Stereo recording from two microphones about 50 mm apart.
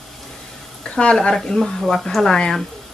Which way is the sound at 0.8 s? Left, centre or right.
Centre.